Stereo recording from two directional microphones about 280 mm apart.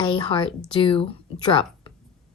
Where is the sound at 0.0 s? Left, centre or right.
Centre.